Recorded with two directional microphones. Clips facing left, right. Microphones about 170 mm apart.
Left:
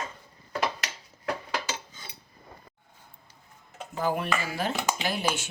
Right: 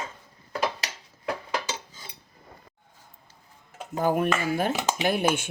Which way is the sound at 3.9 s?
50° right (ahead or behind).